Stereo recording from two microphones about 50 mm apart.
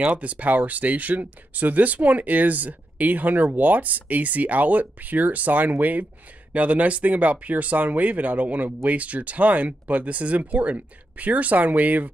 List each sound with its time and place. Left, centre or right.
0.0 s speech: right